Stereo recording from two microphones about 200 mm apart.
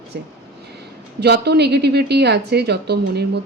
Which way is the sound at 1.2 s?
55° right (ahead or behind).